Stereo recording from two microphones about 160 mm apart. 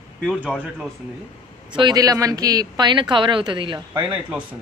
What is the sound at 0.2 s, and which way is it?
Speech, centre (ahead or behind).